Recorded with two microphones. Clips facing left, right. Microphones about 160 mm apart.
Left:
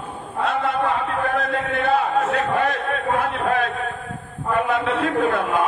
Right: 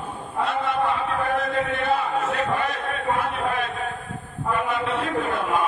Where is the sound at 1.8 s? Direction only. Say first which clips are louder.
Left 4 dB; 75° left (ahead or behind).